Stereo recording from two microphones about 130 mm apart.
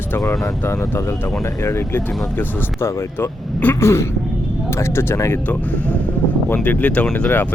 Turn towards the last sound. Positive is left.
turn(degrees=15)  # may be behind; listen again after turning